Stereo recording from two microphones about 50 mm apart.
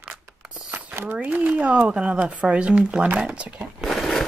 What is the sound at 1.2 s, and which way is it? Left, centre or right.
Speech, right.